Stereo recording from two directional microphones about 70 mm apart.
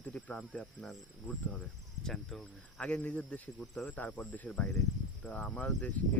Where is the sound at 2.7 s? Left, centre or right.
Centre.